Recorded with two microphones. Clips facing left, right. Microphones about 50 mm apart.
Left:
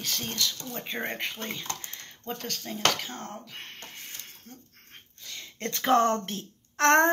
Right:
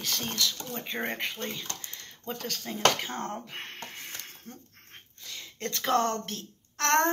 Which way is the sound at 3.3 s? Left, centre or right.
Centre.